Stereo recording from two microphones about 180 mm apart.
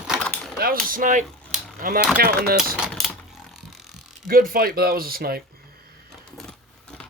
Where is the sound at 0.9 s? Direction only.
45° right (ahead or behind).